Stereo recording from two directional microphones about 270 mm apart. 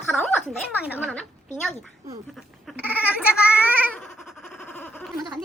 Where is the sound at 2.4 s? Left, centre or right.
Centre.